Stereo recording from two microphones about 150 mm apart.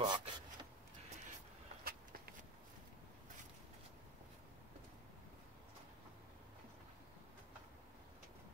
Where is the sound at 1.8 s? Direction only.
80° right.